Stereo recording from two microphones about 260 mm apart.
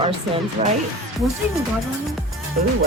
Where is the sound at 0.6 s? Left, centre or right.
Right.